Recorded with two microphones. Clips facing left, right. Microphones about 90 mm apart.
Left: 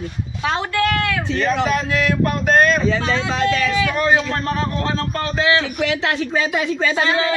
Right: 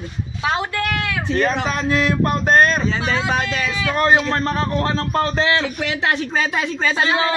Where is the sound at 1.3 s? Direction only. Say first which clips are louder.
Even; 40° right (ahead or behind).